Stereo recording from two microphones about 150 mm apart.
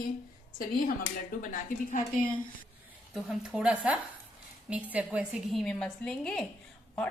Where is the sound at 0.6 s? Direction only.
70° left (ahead or behind).